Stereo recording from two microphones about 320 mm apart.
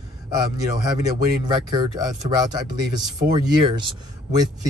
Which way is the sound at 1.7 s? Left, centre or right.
Centre.